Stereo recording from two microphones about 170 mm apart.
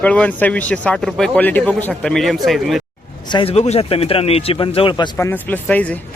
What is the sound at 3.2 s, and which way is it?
A man's voice, 30° left (ahead or behind).